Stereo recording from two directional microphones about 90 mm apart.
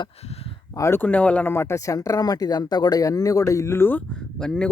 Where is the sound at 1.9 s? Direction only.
40° left (ahead or behind); by 4.0 s 25° left (ahead or behind).